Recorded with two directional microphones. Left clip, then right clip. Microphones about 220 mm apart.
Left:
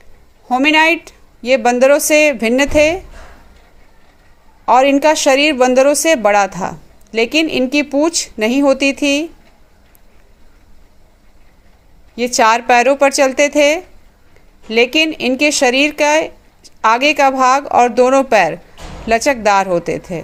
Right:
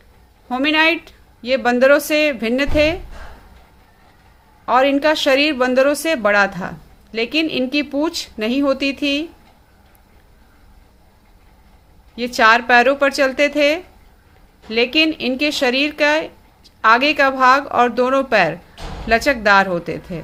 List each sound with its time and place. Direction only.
0.4 s speech: 25° left (ahead or behind)
4.6 s speech: 25° left (ahead or behind)
12.1 s speech: 20° left (ahead or behind)